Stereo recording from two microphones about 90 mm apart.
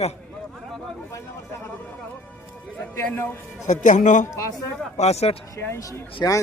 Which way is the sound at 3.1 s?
25° left (ahead or behind).